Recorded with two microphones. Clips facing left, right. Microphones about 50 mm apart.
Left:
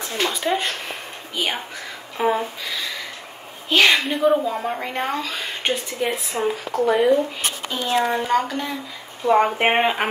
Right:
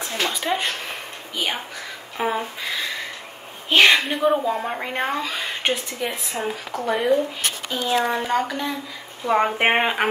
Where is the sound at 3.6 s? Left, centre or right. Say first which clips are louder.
Right 1 dB; right.